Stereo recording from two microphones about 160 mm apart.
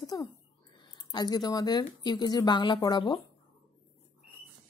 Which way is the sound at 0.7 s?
25° left (ahead or behind).